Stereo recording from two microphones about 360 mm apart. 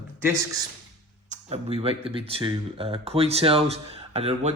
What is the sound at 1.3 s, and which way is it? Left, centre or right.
Speech, centre.